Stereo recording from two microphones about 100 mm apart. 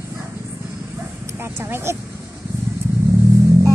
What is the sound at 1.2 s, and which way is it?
Speech, 25° right (ahead or behind).